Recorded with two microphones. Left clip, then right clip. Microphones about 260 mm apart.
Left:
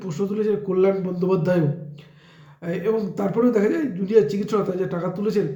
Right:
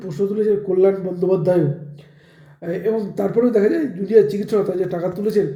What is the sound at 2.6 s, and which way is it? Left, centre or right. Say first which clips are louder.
A man's voice: right 2 dB; centre.